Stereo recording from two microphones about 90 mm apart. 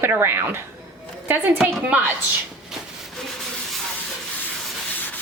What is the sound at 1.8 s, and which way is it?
Speech, 20° right (ahead or behind).